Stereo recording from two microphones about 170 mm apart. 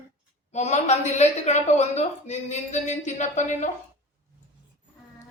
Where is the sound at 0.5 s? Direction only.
40° left (ahead or behind).